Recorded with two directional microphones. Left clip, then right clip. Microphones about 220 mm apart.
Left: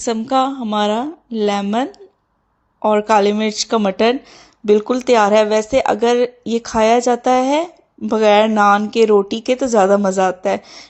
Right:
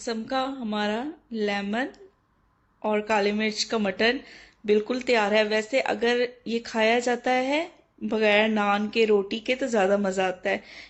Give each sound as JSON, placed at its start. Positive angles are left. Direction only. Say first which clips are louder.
{"t": 0.0, "sound": "speech", "louder": "left 12 dB", "side_deg": 35}